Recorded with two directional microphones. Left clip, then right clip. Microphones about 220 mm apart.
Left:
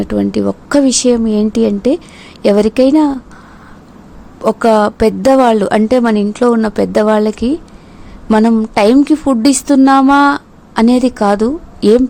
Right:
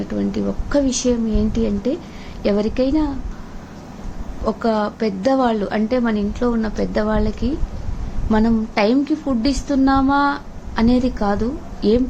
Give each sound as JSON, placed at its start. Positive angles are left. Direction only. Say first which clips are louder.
{"t": 0.1, "sound": "a woman's voice", "louder": "left 8 dB", "side_deg": 50}
{"t": 4.4, "sound": "a woman's voice", "louder": "left 10 dB", "side_deg": 50}